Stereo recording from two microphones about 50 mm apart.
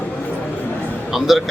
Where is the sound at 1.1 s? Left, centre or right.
Centre.